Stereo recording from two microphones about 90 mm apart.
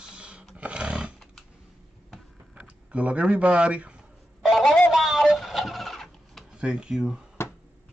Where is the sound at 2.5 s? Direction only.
15° right (ahead or behind).